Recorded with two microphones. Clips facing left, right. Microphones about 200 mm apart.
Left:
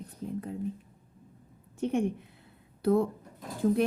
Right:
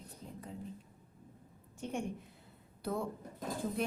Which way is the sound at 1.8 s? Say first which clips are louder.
Left 11 dB; 65° left (ahead or behind).